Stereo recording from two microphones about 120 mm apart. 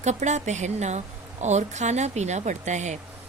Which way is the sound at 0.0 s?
75° right (ahead or behind).